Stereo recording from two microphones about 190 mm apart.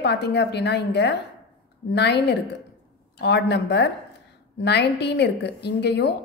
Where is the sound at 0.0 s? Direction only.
60° left (ahead or behind).